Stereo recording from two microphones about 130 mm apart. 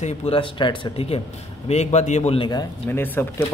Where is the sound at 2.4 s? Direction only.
30° left (ahead or behind).